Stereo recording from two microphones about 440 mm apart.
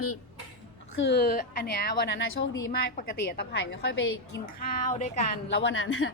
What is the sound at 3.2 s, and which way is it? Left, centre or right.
Speech, left.